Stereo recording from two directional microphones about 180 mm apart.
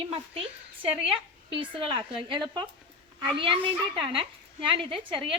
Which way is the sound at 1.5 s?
30° right (ahead or behind).